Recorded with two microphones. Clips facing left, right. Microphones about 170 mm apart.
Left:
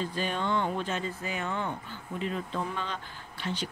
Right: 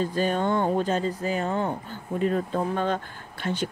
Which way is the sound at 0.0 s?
45° right (ahead or behind).